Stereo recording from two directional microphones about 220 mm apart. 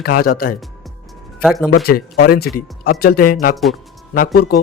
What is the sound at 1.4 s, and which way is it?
Speech, centre (ahead or behind).